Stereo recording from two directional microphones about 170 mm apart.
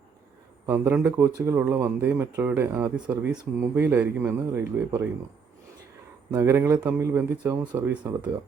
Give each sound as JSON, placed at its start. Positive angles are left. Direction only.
{"t": 0.6, "sound": "speech", "side_deg": -10}
{"t": 6.3, "sound": "speech", "side_deg": -15}